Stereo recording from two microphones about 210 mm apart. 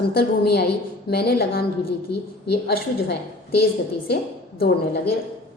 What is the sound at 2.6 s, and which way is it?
Speech, 50° left (ahead or behind).